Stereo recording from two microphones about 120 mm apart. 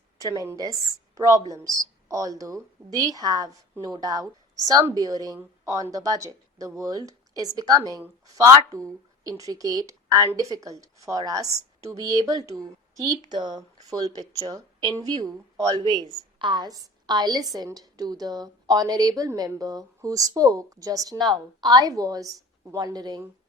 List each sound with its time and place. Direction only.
0.2 s speech: 30° right (ahead or behind)